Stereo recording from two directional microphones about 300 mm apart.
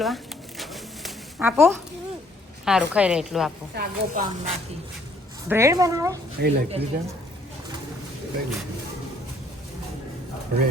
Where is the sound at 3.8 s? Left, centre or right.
Right.